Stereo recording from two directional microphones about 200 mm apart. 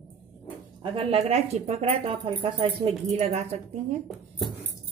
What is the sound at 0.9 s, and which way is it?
Speech, 30° right (ahead or behind).